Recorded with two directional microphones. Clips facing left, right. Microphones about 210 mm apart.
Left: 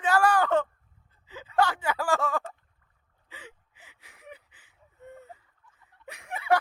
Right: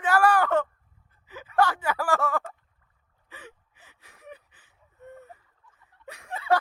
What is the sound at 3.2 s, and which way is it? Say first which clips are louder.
Gasp: right 1 dB; 15° left (ahead or behind).